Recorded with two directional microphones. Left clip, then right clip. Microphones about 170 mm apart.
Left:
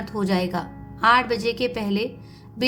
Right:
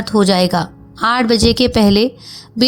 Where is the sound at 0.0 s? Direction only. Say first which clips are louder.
Right 12 dB; 45° right (ahead or behind).